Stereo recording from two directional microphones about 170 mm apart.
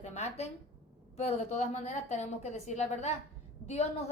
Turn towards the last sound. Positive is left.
turn(degrees=40)  # may be behind; listen again after turning